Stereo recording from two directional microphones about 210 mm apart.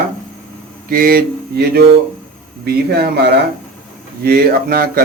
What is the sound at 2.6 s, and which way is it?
Speech, 50° right (ahead or behind).